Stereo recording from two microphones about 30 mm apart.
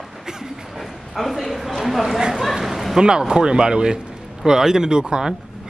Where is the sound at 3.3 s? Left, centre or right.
Right.